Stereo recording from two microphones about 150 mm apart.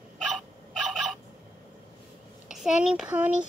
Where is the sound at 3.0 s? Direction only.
10° right (ahead or behind).